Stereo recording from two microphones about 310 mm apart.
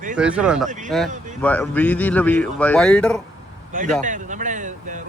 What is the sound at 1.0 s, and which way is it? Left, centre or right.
Speech, right.